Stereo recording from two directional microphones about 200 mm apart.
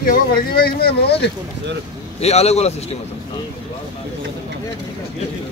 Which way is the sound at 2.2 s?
30° left (ahead or behind).